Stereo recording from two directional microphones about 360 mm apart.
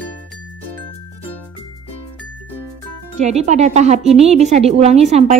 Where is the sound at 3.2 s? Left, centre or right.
Centre.